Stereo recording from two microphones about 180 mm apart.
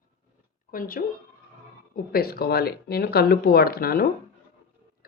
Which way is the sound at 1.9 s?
60° left (ahead or behind).